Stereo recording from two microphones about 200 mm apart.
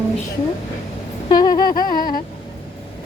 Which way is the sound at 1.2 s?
20° left (ahead or behind).